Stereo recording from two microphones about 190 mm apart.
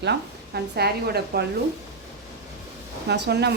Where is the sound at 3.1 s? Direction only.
60° right (ahead or behind).